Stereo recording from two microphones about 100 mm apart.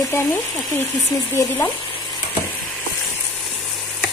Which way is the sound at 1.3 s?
25° left (ahead or behind).